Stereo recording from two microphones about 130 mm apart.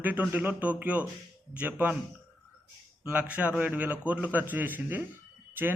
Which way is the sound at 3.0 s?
15° right (ahead or behind).